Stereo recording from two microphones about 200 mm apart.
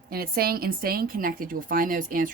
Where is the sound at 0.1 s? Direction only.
50° right (ahead or behind).